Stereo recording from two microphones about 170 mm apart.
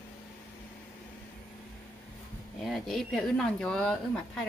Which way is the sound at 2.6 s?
Centre (ahead or behind).